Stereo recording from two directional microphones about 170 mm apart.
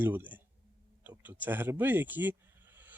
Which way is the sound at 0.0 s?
10° right (ahead or behind).